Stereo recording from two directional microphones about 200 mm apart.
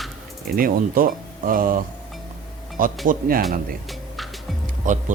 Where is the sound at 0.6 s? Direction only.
45° right (ahead or behind).